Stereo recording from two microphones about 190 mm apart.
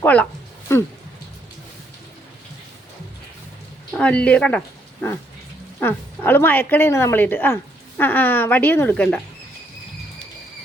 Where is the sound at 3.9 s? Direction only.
5° left (ahead or behind).